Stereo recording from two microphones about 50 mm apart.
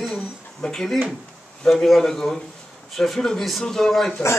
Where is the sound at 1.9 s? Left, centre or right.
Centre.